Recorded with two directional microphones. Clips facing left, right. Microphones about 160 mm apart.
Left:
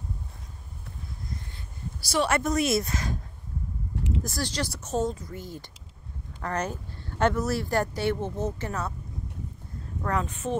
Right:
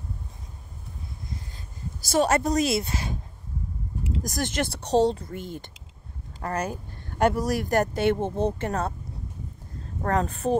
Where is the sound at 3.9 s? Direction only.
75° left (ahead or behind).